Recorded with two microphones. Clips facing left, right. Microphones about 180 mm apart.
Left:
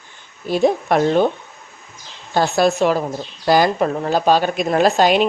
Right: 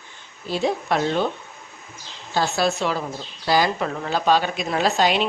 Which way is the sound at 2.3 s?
50° left (ahead or behind).